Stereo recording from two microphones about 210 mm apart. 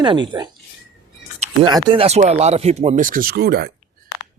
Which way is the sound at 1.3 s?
30° right (ahead or behind).